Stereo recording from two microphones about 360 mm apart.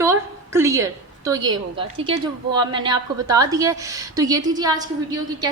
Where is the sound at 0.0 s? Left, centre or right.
Centre.